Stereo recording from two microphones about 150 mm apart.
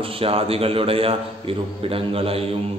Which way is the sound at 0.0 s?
40° right (ahead or behind).